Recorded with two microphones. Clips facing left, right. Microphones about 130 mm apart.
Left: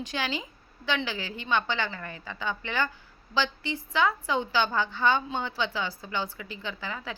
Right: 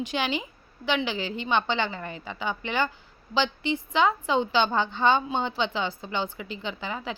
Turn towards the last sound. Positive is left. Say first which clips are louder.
# right 3 dB
turn(degrees=-20)  # may be behind; listen again after turning